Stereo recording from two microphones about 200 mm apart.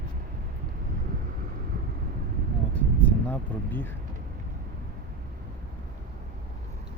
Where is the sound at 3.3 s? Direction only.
10° left (ahead or behind).